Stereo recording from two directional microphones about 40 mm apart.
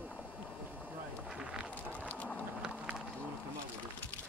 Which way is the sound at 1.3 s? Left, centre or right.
Right.